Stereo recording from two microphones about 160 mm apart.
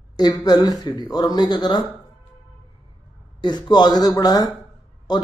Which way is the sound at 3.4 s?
25° left (ahead or behind).